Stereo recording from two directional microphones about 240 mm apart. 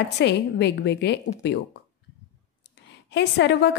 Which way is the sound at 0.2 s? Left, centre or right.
Left.